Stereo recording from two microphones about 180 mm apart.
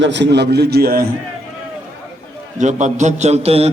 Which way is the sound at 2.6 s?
40° right (ahead or behind).